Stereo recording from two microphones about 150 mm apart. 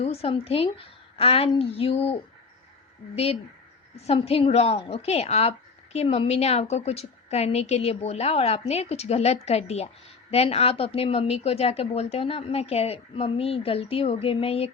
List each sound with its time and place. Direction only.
0.0 s a woman's voice: 40° left (ahead or behind)
3.9 s a woman's voice: 45° left (ahead or behind)